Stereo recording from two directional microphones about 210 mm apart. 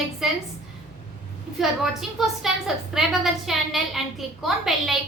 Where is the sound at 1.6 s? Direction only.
Centre (ahead or behind).